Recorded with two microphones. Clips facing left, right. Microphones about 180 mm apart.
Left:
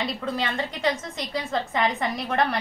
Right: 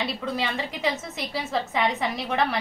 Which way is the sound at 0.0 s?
Centre (ahead or behind).